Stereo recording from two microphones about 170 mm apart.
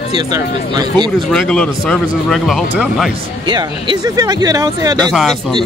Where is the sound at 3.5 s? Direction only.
25° right (ahead or behind).